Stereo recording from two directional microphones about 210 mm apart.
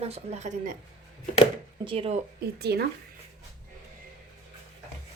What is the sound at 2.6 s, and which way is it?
Speech, 50° right (ahead or behind).